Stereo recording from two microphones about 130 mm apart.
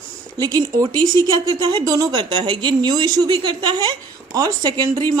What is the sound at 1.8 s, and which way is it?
Speech, 30° right (ahead or behind).